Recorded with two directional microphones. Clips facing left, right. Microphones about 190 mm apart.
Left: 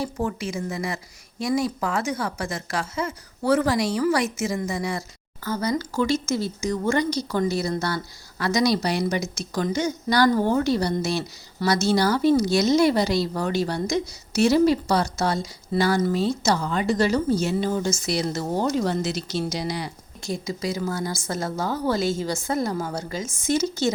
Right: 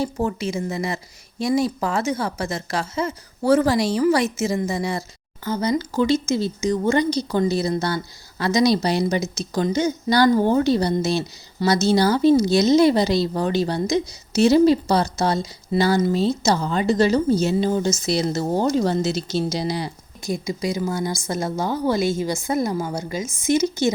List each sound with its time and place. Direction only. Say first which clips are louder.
0.0 s a woman's voice: right 4 dB; 25° right (ahead or behind)
20.2 s speech: right 3 dB; 15° right (ahead or behind)